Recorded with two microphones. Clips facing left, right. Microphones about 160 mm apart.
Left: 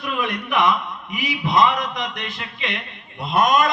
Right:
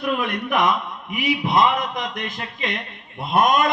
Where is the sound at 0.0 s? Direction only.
50° right (ahead or behind).